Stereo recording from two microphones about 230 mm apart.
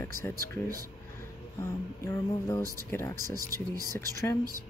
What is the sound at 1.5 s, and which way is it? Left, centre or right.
Speech, centre.